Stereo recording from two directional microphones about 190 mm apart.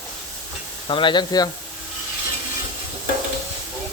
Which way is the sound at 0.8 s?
25° left (ahead or behind).